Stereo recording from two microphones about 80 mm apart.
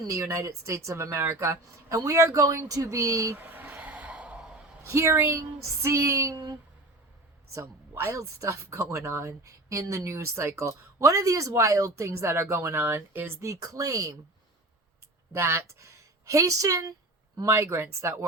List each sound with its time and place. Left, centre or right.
0.1 s a woman's voice: right
3.3 s a sound: right
4.9 s a woman's voice: right
7.5 s a woman's voice: right
13.5 s speech: right
15.4 s a woman's voice: right